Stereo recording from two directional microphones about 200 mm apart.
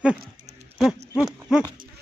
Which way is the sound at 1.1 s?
5° right (ahead or behind).